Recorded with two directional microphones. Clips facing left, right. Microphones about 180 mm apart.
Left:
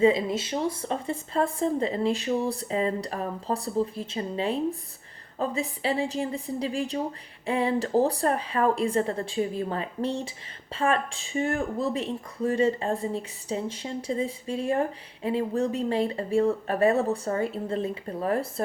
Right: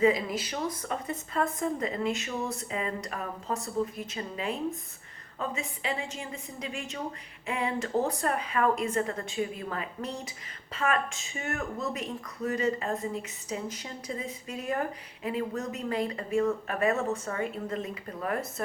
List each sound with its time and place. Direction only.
0.0 s speech: 25° left (ahead or behind)